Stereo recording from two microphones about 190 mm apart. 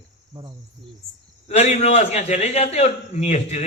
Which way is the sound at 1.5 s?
35° left (ahead or behind).